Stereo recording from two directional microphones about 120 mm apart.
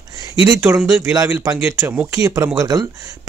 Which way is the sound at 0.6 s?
20° right (ahead or behind).